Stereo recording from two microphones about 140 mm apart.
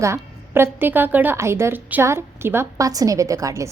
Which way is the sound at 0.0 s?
20° right (ahead or behind).